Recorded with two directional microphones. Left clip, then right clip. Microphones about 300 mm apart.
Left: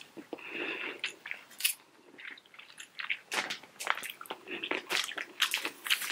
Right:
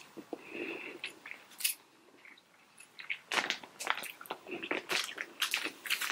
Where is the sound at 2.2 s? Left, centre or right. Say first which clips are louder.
Left 10 dB; centre.